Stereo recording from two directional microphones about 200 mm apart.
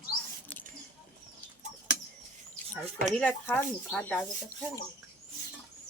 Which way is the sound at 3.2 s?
5° left (ahead or behind).